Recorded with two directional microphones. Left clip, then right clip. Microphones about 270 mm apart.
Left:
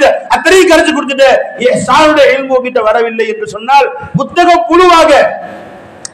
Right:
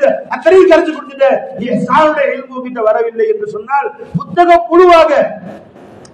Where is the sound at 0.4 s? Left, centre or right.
Left.